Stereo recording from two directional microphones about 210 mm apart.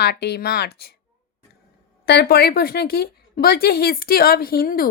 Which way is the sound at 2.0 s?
50° left (ahead or behind).